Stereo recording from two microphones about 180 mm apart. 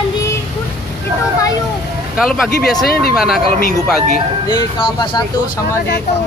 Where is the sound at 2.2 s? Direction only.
Centre (ahead or behind).